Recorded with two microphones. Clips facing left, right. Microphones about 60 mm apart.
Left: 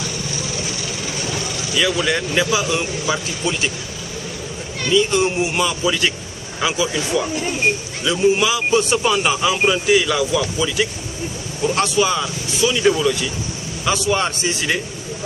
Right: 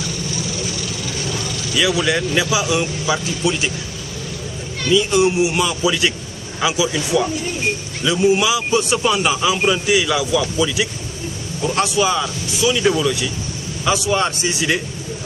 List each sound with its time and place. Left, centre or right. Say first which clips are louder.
1.8 s speech: right 1 dB; centre
4.9 s speech: right 2 dB; centre